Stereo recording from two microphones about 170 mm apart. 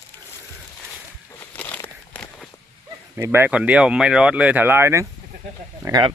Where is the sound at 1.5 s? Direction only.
10° left (ahead or behind).